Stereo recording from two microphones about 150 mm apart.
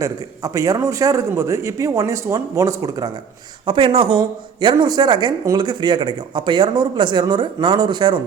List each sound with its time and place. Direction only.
0.0 s a man's voice: 20° right (ahead or behind)
3.7 s speech: 35° right (ahead or behind)